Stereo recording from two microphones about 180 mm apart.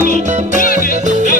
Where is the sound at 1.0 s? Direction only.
40° right (ahead or behind).